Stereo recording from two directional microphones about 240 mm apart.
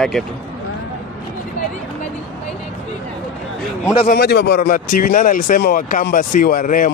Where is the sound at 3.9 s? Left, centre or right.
Left.